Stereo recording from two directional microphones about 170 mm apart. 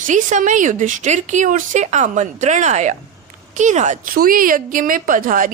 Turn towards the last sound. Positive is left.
turn(degrees=-55)  # may be behind; listen again after turning